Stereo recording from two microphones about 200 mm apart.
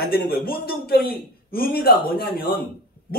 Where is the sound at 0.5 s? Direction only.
50° left (ahead or behind).